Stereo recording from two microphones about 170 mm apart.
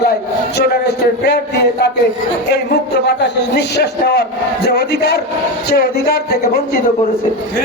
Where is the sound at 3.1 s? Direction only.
80° left; by 6.4 s 65° left (ahead or behind).